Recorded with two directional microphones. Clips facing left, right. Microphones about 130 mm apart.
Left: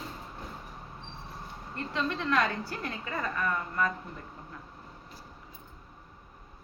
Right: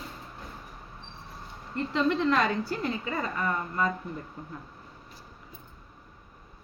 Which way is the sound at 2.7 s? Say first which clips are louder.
Right 6 dB; 20° right (ahead or behind).